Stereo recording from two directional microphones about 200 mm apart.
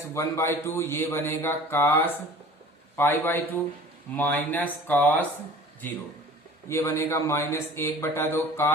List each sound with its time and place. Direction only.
0.1 s a man's voice: 15° left (ahead or behind)
6.7 s a man's voice: 15° left (ahead or behind)